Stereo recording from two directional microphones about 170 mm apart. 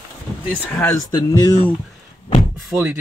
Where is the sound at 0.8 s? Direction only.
20° left (ahead or behind).